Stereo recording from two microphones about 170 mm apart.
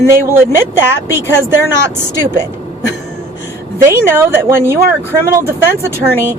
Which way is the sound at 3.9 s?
15° right (ahead or behind).